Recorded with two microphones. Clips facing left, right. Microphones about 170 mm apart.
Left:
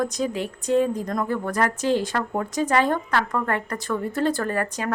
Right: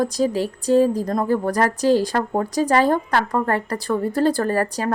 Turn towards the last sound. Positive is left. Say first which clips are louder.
# right 4 dB
turn(degrees=-35)  # may be behind; listen again after turning